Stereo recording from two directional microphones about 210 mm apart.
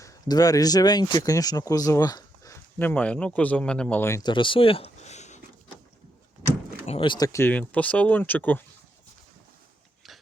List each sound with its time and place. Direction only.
0.0 s speech: 15° left (ahead or behind); by 5.4 s 35° left (ahead or behind)
6.8 s speech: 25° left (ahead or behind); by 8.6 s 10° left (ahead or behind)